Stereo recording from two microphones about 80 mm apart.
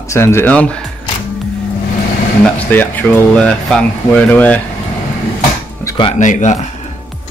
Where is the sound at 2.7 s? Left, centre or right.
Left.